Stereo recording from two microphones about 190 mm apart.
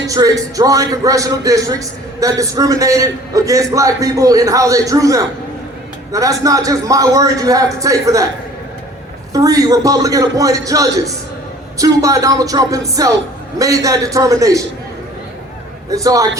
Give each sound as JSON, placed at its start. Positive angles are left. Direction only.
{"t": 0.1, "sound": "a man's voice", "side_deg": -15}
{"t": 9.3, "sound": "a man's voice", "side_deg": -20}
{"t": 15.9, "sound": "a man's voice", "side_deg": -15}